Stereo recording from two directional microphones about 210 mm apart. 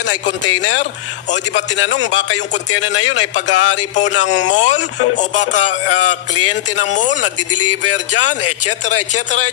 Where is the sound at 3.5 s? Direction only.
65° left (ahead or behind).